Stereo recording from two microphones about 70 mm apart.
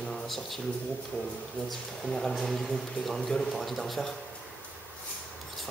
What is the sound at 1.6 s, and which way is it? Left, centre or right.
A man's voice, centre.